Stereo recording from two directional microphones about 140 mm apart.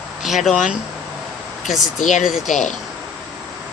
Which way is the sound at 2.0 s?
65° left (ahead or behind).